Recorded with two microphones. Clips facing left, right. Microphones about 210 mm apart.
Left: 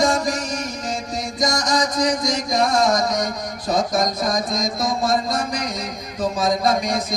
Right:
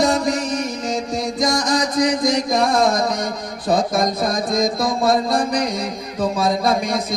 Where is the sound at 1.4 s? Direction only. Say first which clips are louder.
Right 1 dB; 55° right (ahead or behind).